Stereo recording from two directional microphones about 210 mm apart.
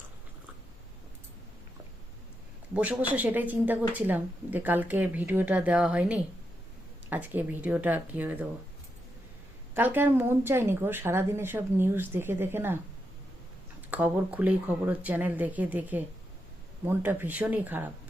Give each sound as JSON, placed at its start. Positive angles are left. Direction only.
{"t": 2.7, "sound": "a woman's voice", "side_deg": -5}
{"t": 9.7, "sound": "a woman's voice", "side_deg": -10}
{"t": 13.9, "sound": "a woman's voice", "side_deg": -5}